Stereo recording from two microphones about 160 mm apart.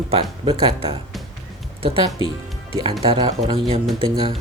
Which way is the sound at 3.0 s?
35° right (ahead or behind).